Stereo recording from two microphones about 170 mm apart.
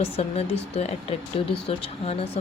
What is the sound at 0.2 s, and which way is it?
A woman's voice, 35° left (ahead or behind).